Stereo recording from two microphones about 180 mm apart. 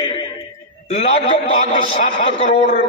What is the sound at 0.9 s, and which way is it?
A man's voice, 40° left (ahead or behind).